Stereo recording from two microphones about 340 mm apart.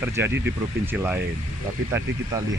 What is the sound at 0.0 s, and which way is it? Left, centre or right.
Speech, centre.